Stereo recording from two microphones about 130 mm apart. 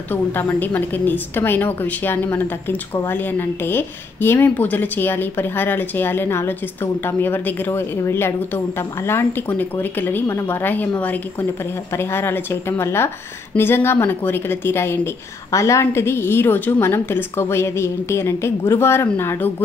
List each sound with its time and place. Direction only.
0.1 s a woman's voice: 15° left (ahead or behind)